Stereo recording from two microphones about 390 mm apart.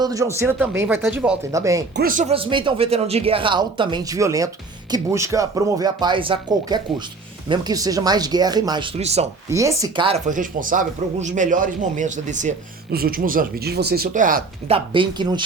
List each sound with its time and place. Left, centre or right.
0.0 s speech: centre
2.0 s speech: right